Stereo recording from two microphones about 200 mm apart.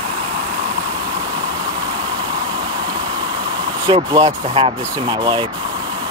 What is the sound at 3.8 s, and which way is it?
Speech, 25° right (ahead or behind).